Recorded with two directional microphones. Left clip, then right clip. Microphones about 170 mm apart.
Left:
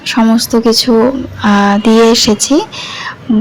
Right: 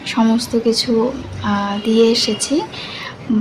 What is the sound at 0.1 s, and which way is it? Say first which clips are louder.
Speech: left 6 dB; 30° left (ahead or behind).